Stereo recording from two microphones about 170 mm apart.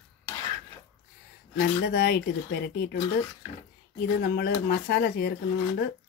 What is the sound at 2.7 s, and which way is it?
Speech, 65° left (ahead or behind).